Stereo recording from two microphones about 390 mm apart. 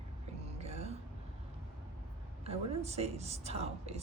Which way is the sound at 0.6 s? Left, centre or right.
Centre.